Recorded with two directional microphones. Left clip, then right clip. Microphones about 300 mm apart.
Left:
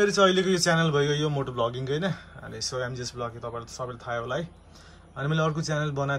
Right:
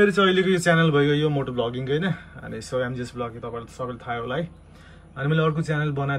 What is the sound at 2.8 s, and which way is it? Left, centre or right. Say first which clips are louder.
A man's voice: right 3 dB; centre.